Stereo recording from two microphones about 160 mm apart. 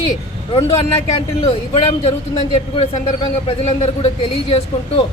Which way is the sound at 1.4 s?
35° left (ahead or behind).